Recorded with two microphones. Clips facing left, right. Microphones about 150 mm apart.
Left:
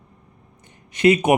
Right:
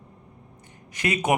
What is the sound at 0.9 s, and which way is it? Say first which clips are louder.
Speech: left 10 dB; 25° left (ahead or behind).